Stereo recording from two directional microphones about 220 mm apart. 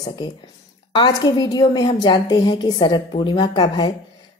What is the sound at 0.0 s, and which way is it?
A woman's voice, 20° left (ahead or behind).